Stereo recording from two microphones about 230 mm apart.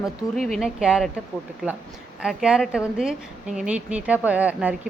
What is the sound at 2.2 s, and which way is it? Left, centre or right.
A woman's voice, centre.